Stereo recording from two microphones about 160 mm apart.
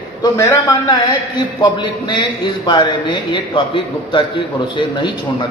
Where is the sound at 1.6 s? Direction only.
30° left (ahead or behind).